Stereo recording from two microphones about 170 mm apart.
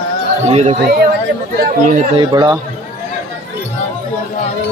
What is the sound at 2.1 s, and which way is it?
Speech, 25° right (ahead or behind).